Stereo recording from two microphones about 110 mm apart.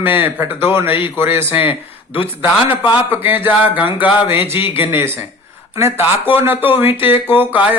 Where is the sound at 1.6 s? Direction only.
55° left (ahead or behind).